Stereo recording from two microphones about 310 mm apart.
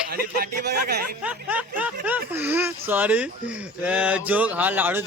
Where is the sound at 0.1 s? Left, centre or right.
Right.